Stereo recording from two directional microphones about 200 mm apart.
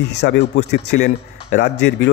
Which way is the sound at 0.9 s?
40° left (ahead or behind).